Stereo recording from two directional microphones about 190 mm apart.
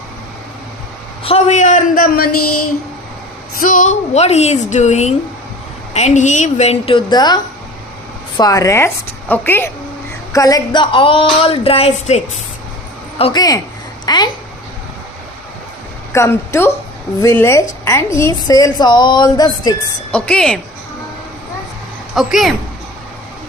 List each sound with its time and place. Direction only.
1.2 s a woman's voice: 35° left (ahead or behind)
3.5 s a woman's voice: 45° left (ahead or behind); by 14.3 s 20° left (ahead or behind)
16.1 s a woman's voice: 15° left (ahead or behind)
20.1 s a woman's voice: 5° left (ahead or behind)
22.1 s a woman's voice: centre (ahead or behind)